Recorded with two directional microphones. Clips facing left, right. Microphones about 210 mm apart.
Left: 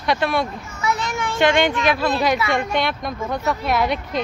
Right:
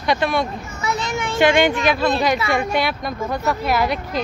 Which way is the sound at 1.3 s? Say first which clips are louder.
Right 2 dB; 5° right (ahead or behind).